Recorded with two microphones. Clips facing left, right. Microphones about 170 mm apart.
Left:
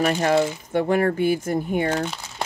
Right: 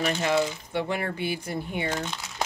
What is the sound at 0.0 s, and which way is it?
Speech, 45° left (ahead or behind).